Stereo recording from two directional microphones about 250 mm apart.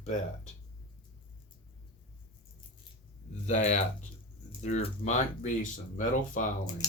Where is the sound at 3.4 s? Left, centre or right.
Left.